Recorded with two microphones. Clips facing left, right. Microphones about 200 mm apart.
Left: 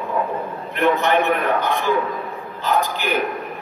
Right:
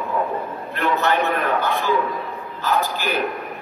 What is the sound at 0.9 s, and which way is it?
A man's voice, 15° left (ahead or behind).